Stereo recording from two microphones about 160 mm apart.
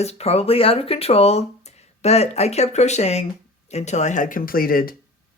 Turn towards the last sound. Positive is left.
turn(degrees=65)  # may be behind; listen again after turning